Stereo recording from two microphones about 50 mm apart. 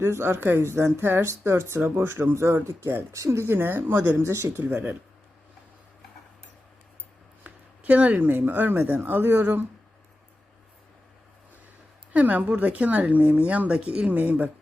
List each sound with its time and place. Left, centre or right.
0.0 s speech: right
1.8 s speech: right
2.6 s speech: right
3.4 s speech: right
4.2 s speech: right
7.4 s speech: right
12.1 s speech: right
14.1 s speech: right